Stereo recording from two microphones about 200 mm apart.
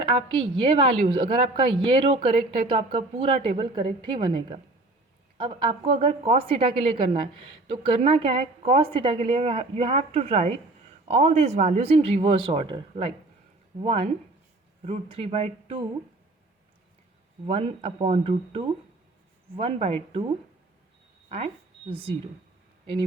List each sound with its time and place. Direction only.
0.0 s speech: 25° right (ahead or behind)
17.4 s speech: 30° right (ahead or behind)
21.2 s speech: 30° right (ahead or behind)